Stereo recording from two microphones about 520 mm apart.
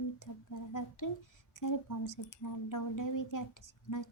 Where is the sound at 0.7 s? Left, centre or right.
Left.